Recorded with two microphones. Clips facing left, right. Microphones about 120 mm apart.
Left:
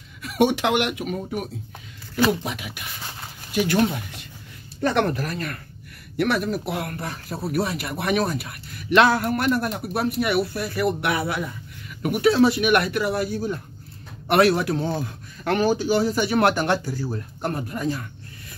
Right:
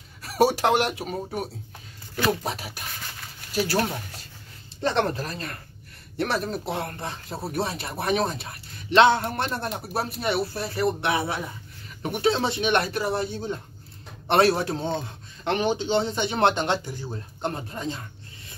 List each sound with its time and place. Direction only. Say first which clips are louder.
0.2 s speech: left 1 dB; 35° right (ahead or behind)